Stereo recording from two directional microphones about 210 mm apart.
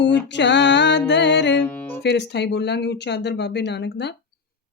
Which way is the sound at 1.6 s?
10° left (ahead or behind).